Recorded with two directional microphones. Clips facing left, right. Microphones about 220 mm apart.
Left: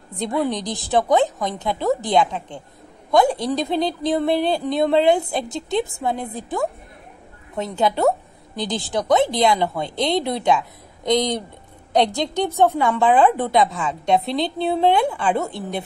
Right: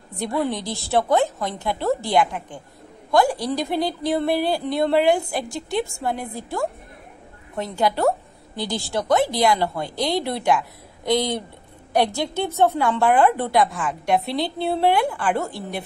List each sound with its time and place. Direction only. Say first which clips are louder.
0.2 s a woman's voice: left 2 dB; 20° left (ahead or behind)